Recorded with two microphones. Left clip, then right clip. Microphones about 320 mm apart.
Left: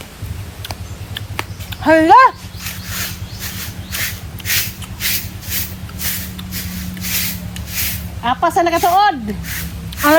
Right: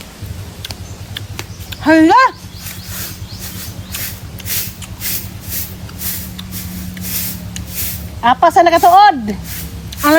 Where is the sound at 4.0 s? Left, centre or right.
Left.